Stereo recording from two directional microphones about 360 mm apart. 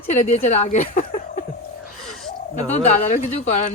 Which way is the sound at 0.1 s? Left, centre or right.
Centre.